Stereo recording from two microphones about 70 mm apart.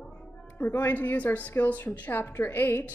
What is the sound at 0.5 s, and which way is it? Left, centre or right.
A woman's voice, left.